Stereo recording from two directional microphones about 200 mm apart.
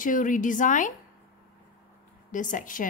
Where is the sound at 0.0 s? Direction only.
40° left (ahead or behind).